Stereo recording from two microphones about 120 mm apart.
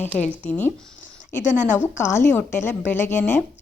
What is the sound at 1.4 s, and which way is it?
Speech, 90° left.